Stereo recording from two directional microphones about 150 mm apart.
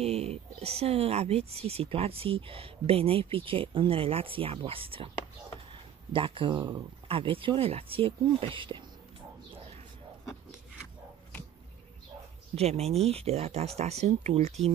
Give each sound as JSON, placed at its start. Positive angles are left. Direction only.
{"t": 0.0, "sound": "speech", "side_deg": -40}
{"t": 6.1, "sound": "speech", "side_deg": -35}
{"t": 12.5, "sound": "speech", "side_deg": -45}